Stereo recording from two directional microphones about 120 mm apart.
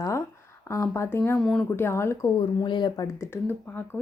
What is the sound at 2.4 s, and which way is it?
Speech, 40° left (ahead or behind).